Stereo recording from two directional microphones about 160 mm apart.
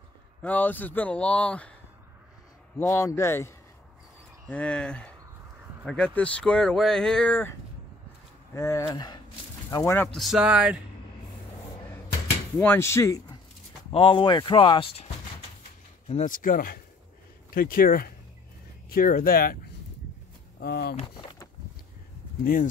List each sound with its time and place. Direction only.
0.4 s a man's voice: 10° left (ahead or behind)
2.8 s a man's voice: 15° left (ahead or behind)
8.5 s speech: 20° left (ahead or behind)
9.9 s speech: centre (ahead or behind)
12.5 s a man's voice: 15° left (ahead or behind)
13.8 s speech: 35° left (ahead or behind)
16.1 s speech: 50° left (ahead or behind); by 19.6 s 65° left (ahead or behind)
20.5 s speech: 85° left
22.4 s speech: 60° left (ahead or behind)